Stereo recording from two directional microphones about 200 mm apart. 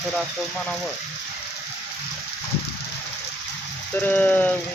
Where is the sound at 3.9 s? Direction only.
10° left (ahead or behind).